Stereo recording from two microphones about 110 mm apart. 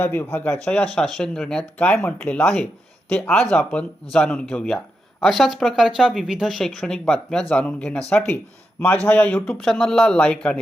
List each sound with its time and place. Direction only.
0.0 s speech: 20° left (ahead or behind)